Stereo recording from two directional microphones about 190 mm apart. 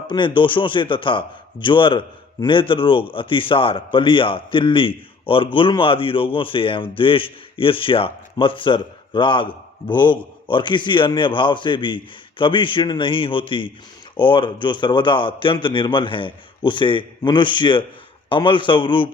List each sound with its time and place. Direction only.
0.1 s a man's voice: 25° left (ahead or behind)